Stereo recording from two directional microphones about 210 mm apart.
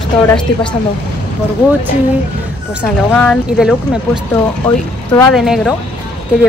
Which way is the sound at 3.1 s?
5° left (ahead or behind).